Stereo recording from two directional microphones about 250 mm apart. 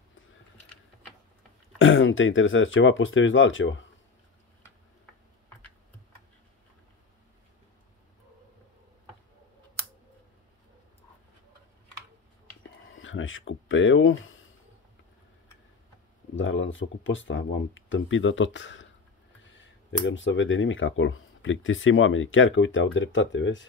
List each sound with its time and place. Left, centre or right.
1.8 s speech: left
12.9 s a sound: left
16.3 s speech: left